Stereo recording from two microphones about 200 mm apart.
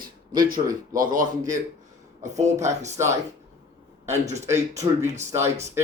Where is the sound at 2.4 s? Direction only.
35° right (ahead or behind).